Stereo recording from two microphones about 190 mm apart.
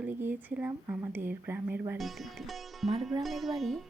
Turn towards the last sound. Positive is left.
turn(degrees=0)  # may be behind; listen again after turning